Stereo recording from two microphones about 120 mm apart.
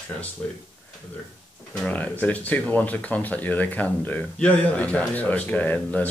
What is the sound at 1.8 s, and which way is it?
Speech, 10° left (ahead or behind).